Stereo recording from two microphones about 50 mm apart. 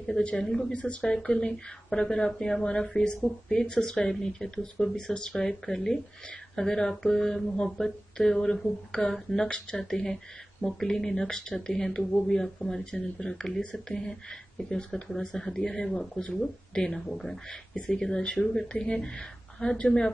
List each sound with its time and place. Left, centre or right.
0.0 s speech: centre
0.5 s speech: centre
16.2 s speech: centre